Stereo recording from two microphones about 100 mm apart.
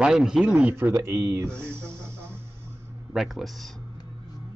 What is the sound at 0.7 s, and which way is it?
Speech, 25° right (ahead or behind).